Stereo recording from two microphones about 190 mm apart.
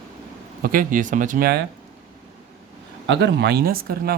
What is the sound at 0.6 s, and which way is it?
Speech, 50° right (ahead or behind).